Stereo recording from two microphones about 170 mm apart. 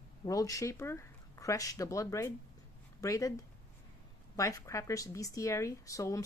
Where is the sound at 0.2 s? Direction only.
20° left (ahead or behind).